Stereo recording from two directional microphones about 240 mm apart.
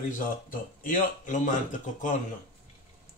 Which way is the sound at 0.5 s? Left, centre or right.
Left.